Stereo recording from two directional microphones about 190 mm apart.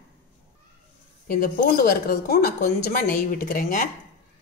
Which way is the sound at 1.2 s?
50° left (ahead or behind).